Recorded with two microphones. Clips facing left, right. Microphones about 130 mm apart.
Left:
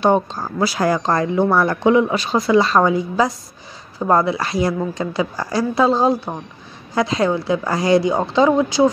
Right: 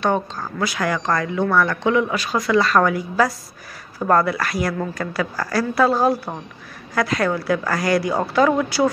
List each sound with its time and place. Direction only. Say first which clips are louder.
0.0 s a woman's voice: left 5 dB; 30° left (ahead or behind)